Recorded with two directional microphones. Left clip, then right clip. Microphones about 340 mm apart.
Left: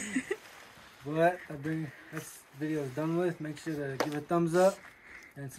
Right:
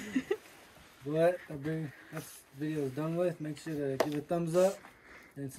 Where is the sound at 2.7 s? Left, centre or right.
Centre.